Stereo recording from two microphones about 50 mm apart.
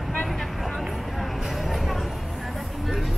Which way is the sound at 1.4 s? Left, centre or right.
Centre.